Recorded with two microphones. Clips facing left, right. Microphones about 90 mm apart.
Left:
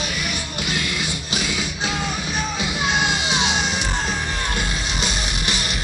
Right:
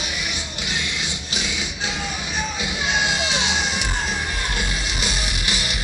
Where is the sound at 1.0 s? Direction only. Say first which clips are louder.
Left 3 dB; 20° right (ahead or behind).